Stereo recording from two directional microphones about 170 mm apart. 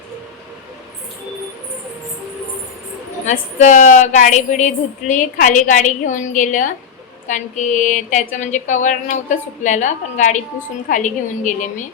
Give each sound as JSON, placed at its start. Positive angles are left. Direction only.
{"t": 3.2, "sound": "a woman's voice", "side_deg": 50}